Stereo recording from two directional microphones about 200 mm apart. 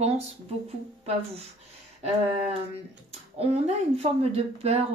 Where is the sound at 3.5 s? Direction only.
30° right (ahead or behind).